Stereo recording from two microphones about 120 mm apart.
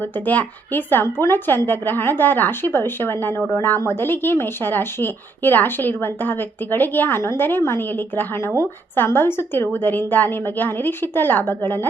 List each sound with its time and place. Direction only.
0.0 s a woman's voice: 15° left (ahead or behind)